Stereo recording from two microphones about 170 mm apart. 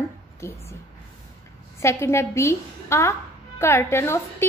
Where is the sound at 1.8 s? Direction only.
15° left (ahead or behind).